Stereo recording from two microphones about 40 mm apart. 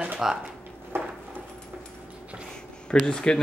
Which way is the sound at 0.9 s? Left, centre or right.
Right.